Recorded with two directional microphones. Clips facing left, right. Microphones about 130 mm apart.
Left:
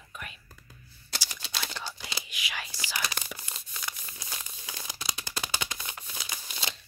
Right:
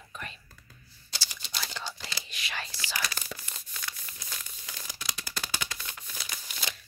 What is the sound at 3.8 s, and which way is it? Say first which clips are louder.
Crumpling: left 2 dB; 25° left (ahead or behind).